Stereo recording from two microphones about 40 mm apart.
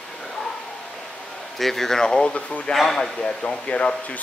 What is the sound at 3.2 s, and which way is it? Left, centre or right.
Speech, left.